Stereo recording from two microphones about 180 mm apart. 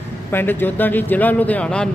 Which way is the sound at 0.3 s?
10° left (ahead or behind).